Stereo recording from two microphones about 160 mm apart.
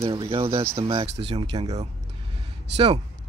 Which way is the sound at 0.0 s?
35° right (ahead or behind).